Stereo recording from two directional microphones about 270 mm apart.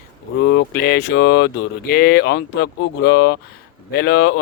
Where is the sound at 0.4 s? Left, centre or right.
Left.